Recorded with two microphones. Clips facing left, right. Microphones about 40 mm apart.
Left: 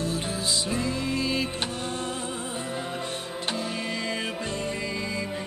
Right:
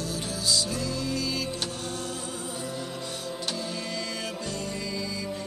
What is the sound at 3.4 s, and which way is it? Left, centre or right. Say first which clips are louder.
Music: left 5 dB; left.